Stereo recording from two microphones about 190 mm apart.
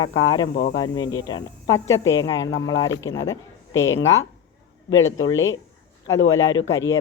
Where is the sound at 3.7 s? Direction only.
85° left.